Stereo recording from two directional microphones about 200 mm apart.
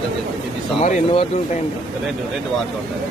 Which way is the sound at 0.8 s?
30° left (ahead or behind).